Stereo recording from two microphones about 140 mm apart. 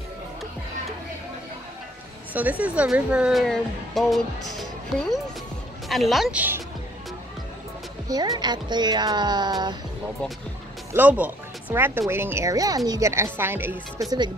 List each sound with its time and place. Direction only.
2.3 s speech: 10° right (ahead or behind)
8.1 s speech: 30° right (ahead or behind)
10.9 s speech: 10° right (ahead or behind)